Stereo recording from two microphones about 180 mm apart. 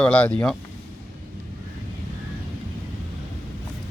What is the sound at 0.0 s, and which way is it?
Speech, 5° left (ahead or behind).